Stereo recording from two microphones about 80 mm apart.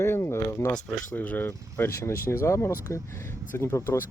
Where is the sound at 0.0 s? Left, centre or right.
Left.